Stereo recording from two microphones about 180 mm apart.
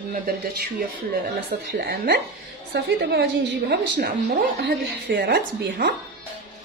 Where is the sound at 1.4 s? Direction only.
55° right (ahead or behind).